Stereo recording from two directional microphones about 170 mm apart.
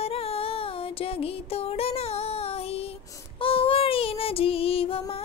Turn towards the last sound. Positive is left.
turn(degrees=35)  # may be behind; listen again after turning